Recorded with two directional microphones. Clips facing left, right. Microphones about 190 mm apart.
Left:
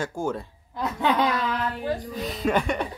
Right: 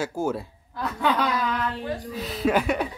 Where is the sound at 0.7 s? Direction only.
20° left (ahead or behind).